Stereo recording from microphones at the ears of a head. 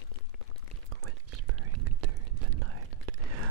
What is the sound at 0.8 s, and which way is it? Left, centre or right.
Whispering, right.